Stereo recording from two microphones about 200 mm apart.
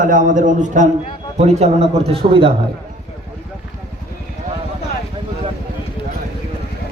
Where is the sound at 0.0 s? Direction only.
40° right (ahead or behind).